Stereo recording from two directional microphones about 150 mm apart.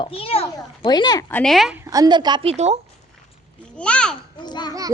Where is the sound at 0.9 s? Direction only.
25° left (ahead or behind).